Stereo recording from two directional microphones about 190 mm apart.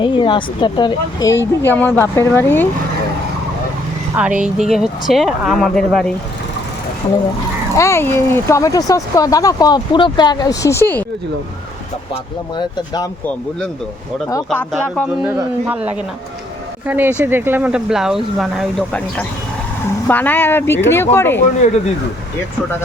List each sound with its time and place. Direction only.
0.0 s speech: 25° left (ahead or behind); by 2.6 s 10° left (ahead or behind)
4.1 s speech: 5° right (ahead or behind)
7.8 s speech: 15° left (ahead or behind)
12.5 s speech: 20° left (ahead or behind)
14.3 s speech: 15° left (ahead or behind)
14.7 s speech: 5° right (ahead or behind)
20.1 s speech: 10° left (ahead or behind)